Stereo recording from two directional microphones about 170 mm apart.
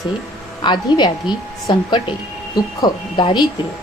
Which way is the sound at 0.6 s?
25° left (ahead or behind).